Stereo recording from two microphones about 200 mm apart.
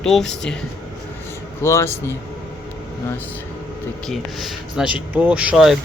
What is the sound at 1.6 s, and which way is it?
Speech, 15° left (ahead or behind).